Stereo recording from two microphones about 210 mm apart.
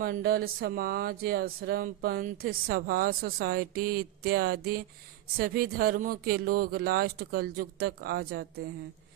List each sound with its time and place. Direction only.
0.0 s speech: 45° right (ahead or behind)